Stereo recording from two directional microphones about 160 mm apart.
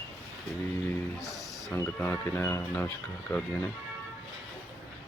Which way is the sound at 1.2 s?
Centre (ahead or behind).